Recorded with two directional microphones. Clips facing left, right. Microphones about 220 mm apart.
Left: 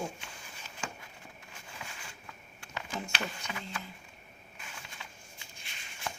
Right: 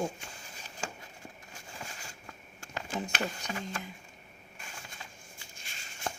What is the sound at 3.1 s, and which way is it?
Speech, 40° right (ahead or behind).